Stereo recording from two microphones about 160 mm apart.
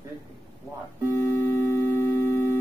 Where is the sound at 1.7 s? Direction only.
15° left (ahead or behind).